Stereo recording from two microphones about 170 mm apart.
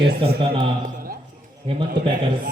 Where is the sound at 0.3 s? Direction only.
30° right (ahead or behind).